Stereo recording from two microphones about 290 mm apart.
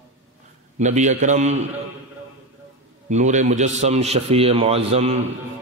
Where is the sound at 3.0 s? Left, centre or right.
Right.